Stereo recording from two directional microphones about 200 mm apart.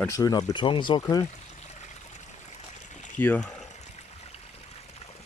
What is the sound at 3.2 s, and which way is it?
Speech, 5° left (ahead or behind).